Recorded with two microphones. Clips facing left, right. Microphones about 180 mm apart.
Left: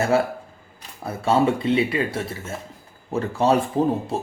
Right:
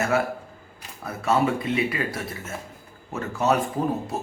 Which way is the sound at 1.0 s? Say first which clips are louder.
Left 3 dB; 30° left (ahead or behind).